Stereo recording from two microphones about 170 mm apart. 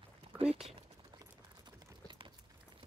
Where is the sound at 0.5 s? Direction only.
Centre (ahead or behind).